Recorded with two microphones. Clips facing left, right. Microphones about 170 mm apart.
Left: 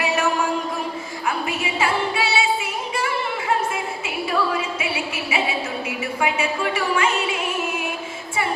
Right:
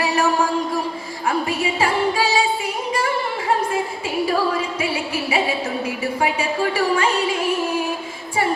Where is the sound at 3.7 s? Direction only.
35° right (ahead or behind).